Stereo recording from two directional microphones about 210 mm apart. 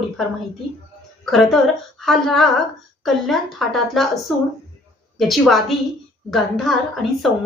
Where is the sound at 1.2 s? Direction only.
Centre (ahead or behind).